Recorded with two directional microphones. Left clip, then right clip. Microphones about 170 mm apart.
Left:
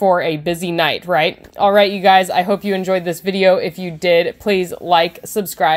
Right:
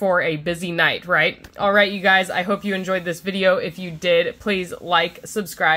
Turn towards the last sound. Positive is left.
turn(degrees=30)  # may be behind; listen again after turning